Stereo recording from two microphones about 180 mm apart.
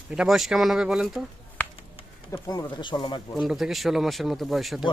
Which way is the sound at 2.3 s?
20° left (ahead or behind).